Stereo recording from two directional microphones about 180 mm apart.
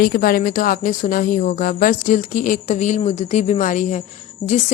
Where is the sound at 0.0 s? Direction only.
55° left (ahead or behind).